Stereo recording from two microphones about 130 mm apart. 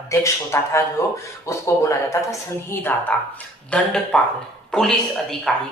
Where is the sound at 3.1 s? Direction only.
15° left (ahead or behind).